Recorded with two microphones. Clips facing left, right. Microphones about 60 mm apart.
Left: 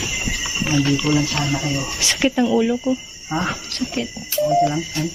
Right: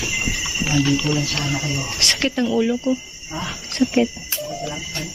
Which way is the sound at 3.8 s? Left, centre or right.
Right.